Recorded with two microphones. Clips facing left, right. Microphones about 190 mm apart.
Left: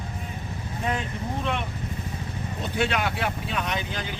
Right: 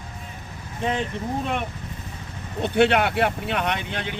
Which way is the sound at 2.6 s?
60° right (ahead or behind).